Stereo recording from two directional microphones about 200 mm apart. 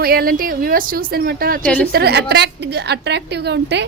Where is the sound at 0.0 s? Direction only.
50° right (ahead or behind).